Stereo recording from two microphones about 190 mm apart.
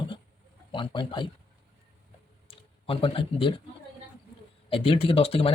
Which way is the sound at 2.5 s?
30° left (ahead or behind).